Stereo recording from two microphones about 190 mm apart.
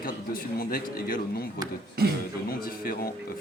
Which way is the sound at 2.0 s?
55° right (ahead or behind).